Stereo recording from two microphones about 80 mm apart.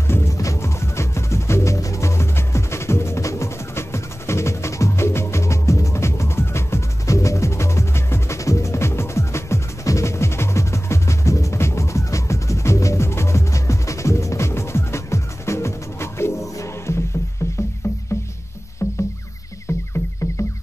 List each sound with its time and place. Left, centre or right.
0.1 s music: left
18.8 s rowboat: left
19.7 s music: left